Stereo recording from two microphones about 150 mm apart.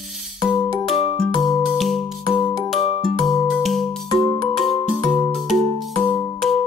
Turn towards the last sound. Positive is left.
turn(degrees=0)  # may be behind; listen again after turning